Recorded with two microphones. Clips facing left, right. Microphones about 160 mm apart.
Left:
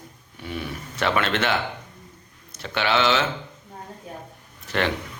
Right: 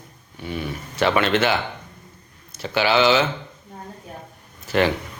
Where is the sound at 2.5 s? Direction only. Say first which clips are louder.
Right 4 dB; 5° right (ahead or behind).